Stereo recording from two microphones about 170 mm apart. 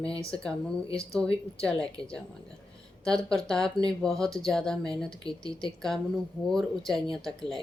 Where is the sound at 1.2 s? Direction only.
5° left (ahead or behind).